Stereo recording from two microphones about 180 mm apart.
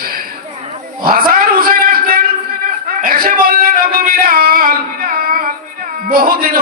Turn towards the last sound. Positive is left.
turn(degrees=-55)  # may be behind; listen again after turning